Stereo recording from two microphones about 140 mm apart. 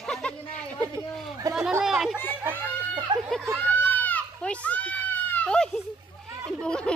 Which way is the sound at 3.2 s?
Centre (ahead or behind).